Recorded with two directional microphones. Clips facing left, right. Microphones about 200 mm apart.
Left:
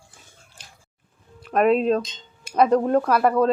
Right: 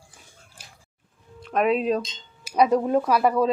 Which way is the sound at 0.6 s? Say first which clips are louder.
Even; 10° right (ahead or behind).